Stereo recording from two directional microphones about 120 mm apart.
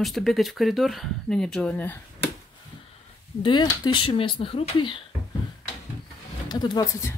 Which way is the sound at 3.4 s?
40° left (ahead or behind).